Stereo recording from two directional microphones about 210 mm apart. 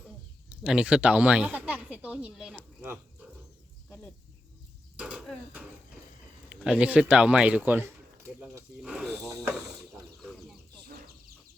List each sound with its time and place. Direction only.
0.6 s speech: 5° right (ahead or behind)
3.8 s a sound: 5° left (ahead or behind)
4.9 s speech: 5° right (ahead or behind)
10.8 s chicken: 45° right (ahead or behind)